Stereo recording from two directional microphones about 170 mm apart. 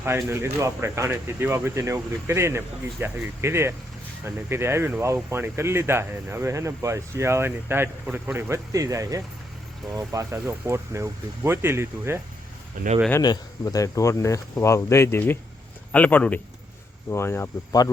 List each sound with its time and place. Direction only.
0.0 s speech: 15° right (ahead or behind)
12.8 s speech: 50° right (ahead or behind)
13.2 s speech: 25° left (ahead or behind)